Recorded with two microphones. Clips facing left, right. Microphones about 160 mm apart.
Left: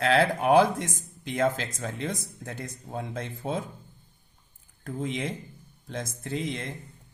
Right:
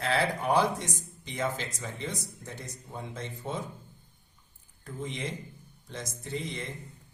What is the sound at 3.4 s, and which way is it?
Speech, 70° left (ahead or behind).